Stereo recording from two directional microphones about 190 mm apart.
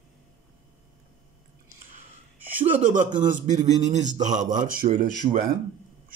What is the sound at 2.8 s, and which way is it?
A man's voice, 40° right (ahead or behind).